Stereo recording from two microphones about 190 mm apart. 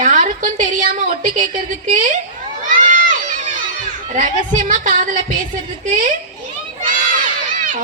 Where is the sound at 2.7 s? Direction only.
40° right (ahead or behind).